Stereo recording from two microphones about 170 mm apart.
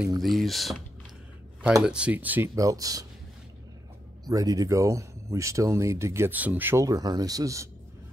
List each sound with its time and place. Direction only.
0.2 s speech: centre (ahead or behind)
1.8 s speech: 5° right (ahead or behind)
4.3 s speech: 20° right (ahead or behind)